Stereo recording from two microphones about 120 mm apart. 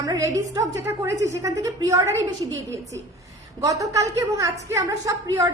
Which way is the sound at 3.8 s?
30° right (ahead or behind).